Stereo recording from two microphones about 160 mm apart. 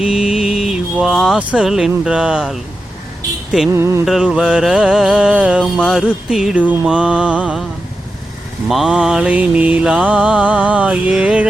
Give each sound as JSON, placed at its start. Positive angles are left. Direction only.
{"t": 0.0, "sound": "speech", "side_deg": -5}
{"t": 3.7, "sound": "mantra", "side_deg": -15}
{"t": 4.0, "sound": "music", "side_deg": -5}
{"t": 8.6, "sound": "mantra", "side_deg": -5}